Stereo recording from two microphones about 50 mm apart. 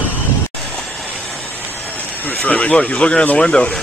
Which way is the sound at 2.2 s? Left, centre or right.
Left.